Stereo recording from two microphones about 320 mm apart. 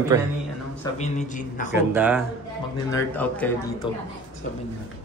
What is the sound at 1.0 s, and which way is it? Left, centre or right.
Speech, left.